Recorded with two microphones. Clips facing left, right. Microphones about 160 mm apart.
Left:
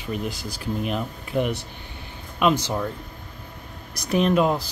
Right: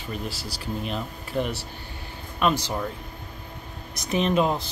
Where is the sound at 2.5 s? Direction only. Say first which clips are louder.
Left 3 dB; 5° right (ahead or behind).